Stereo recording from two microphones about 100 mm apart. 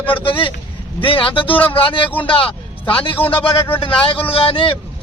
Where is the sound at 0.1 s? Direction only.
55° left (ahead or behind).